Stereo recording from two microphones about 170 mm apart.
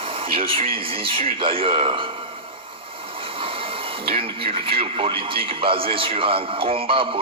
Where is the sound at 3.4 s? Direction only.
30° right (ahead or behind).